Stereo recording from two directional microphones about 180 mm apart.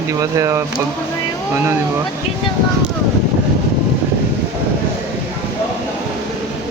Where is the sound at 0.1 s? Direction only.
15° right (ahead or behind).